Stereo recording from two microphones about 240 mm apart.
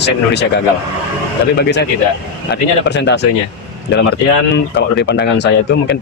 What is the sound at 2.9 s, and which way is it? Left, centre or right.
Speech, left.